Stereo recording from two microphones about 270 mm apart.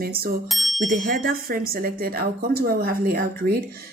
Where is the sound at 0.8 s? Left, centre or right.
Right.